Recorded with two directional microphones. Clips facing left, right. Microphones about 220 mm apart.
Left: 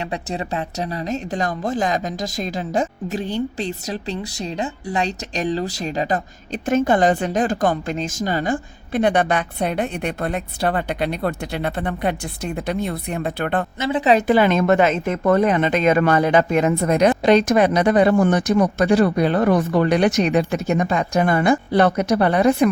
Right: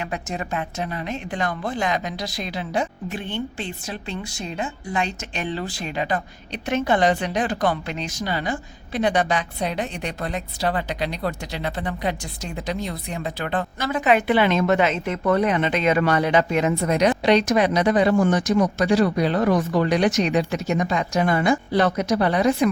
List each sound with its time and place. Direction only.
0.0 s a woman's voice: 30° left (ahead or behind); by 13.7 s 55° left (ahead or behind)
13.7 s a woman's voice: 25° left (ahead or behind); by 22.7 s 55° left (ahead or behind)